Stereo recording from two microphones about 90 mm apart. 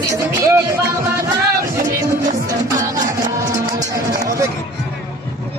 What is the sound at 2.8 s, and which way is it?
Music, 40° right (ahead or behind).